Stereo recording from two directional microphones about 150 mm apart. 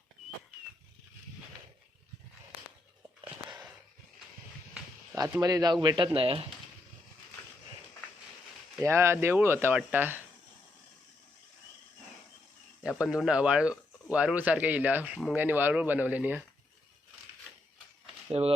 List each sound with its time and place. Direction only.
3.2 s a sound: 10° right (ahead or behind)
5.4 s speech: 25° right (ahead or behind)
6.1 s speech: 40° right (ahead or behind)
8.8 s speech: 20° right (ahead or behind)
13.0 s speech: 5° right (ahead or behind)
18.3 s speech: 45° right (ahead or behind)